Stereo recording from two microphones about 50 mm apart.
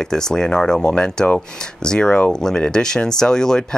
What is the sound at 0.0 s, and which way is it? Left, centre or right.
Speech, centre.